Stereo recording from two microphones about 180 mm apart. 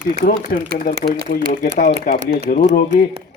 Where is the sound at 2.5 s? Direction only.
50° left (ahead or behind).